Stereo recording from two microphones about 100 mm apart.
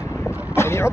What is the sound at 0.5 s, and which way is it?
Vehicle, 25° left (ahead or behind).